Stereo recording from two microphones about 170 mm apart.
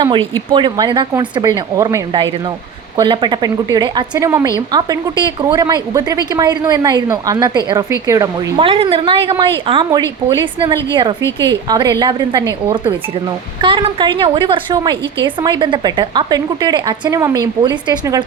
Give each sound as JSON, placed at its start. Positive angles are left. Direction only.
{"t": 0.0, "sound": "a woman's voice", "side_deg": -25}
{"t": 4.3, "sound": "a woman's voice", "side_deg": -15}
{"t": 8.5, "sound": "a woman's voice", "side_deg": -30}
{"t": 13.6, "sound": "a woman's voice", "side_deg": -30}